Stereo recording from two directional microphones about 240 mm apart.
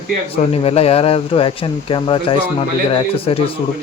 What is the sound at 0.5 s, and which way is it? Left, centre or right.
Speech, left.